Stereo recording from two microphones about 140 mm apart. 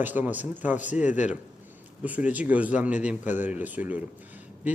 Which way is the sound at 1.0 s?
60° left (ahead or behind).